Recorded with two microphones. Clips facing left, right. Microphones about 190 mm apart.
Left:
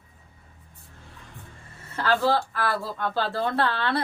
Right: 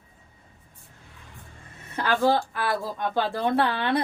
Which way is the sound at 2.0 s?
15° right (ahead or behind).